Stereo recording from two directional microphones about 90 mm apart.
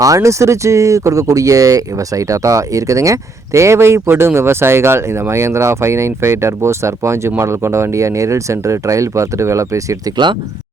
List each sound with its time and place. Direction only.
0.0 s speech: 35° right (ahead or behind)